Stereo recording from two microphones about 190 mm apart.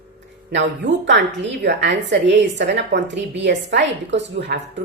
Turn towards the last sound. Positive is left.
turn(degrees=-70)  # may be behind; listen again after turning